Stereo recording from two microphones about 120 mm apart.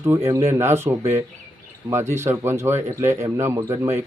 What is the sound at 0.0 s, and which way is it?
Speech, 20° right (ahead or behind).